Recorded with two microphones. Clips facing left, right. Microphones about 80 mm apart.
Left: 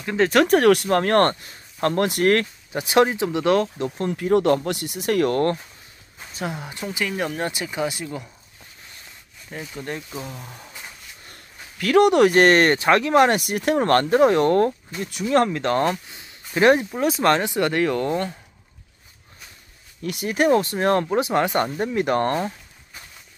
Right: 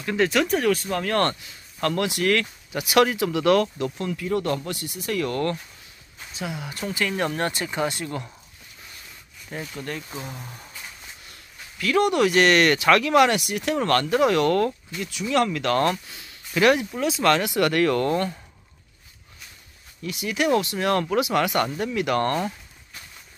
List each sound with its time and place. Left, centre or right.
0.3 s speech: left
2.7 s speech: left
4.2 s speech: left
6.8 s speech: centre
9.5 s speech: centre
9.8 s speech: left
10.2 s speech: centre
11.8 s speech: left
13.8 s speech: left; by 18.3 s centre
20.0 s speech: left